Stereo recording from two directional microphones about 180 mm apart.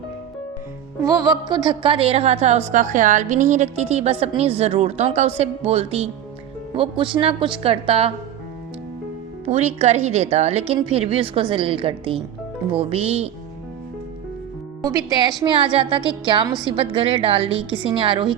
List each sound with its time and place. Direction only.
1.0 s a woman's voice: 20° right (ahead or behind)
9.5 s a woman's voice: 40° right (ahead or behind)
14.8 s a woman's voice: 20° right (ahead or behind)